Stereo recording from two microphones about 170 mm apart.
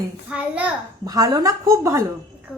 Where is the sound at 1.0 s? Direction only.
20° right (ahead or behind).